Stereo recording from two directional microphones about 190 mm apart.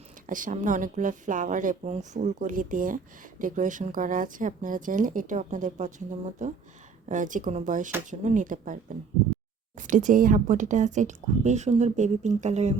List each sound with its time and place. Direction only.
0.3 s speech: 45° right (ahead or behind)